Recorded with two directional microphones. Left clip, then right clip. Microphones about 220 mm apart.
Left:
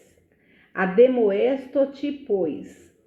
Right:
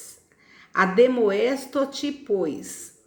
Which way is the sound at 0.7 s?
25° right (ahead or behind).